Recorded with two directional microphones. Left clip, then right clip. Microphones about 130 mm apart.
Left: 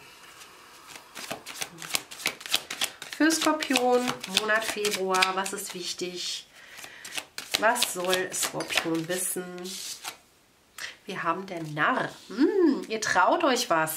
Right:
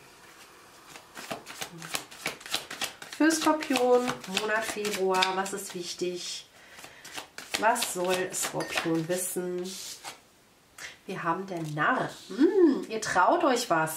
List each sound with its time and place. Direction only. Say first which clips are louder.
1.1 s shuffling cards: left 1 dB; 15° left (ahead or behind)
4.5 s speech: left 2 dB; 15° left (ahead or behind)
7.1 s shuffling cards: left 4 dB; 15° left (ahead or behind)
8.0 s speech: left 1 dB; 15° left (ahead or behind)
9.6 s a sound: even; 10° left (ahead or behind)
11.1 s speech: left 1 dB; 25° left (ahead or behind)